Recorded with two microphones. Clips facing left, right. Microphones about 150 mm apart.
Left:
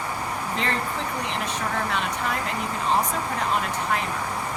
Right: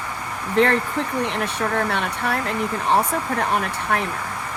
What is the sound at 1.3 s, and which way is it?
Speech, 60° right (ahead or behind).